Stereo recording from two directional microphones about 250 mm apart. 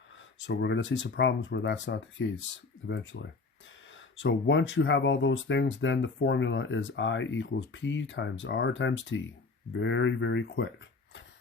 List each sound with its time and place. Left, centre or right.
0.4 s speech: left